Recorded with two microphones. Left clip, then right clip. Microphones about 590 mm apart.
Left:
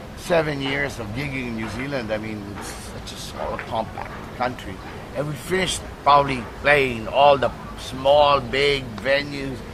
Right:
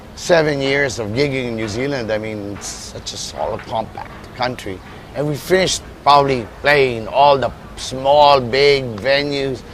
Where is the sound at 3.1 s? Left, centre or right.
Centre.